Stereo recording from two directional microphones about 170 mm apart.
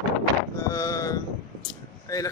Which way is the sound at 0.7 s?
20° left (ahead or behind).